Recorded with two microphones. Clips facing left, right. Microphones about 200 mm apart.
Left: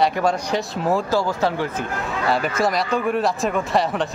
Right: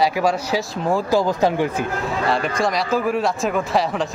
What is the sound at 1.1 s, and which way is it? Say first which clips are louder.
Speech: right 3 dB; 15° right (ahead or behind).